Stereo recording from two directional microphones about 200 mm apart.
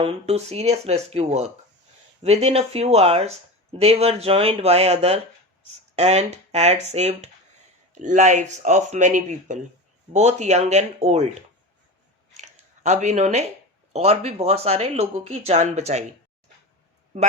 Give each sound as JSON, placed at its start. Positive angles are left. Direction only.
{"t": 0.0, "sound": "speech", "side_deg": -30}
{"t": 12.4, "sound": "a sound", "side_deg": -35}
{"t": 13.9, "sound": "speech", "side_deg": -30}
{"t": 17.1, "sound": "speech", "side_deg": -35}